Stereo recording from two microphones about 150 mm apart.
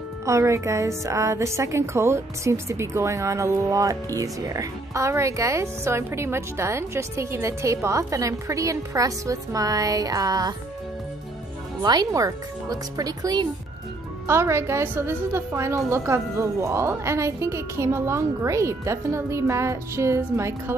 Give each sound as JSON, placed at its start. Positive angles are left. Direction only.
{"t": 0.2, "sound": "a woman's voice", "side_deg": -20}
{"t": 11.8, "sound": "a woman's voice", "side_deg": -25}